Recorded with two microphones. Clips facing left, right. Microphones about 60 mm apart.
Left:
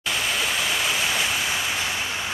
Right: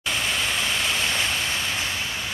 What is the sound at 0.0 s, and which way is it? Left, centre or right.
Waterfall, centre.